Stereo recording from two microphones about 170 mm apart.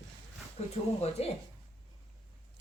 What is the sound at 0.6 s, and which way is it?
Speech, 35° left (ahead or behind).